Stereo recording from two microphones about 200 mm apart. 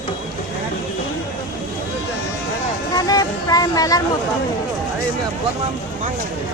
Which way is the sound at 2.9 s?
20° left (ahead or behind).